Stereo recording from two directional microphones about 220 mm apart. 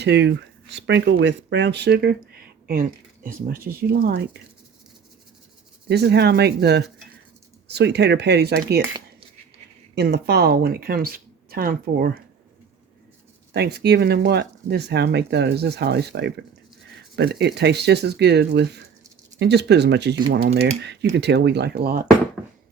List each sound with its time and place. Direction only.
0.0 s speech: 50° right (ahead or behind)
5.9 s speech: 50° right (ahead or behind)
9.9 s speech: 50° right (ahead or behind)
13.5 s speech: 50° right (ahead or behind)
22.4 s a sound: centre (ahead or behind)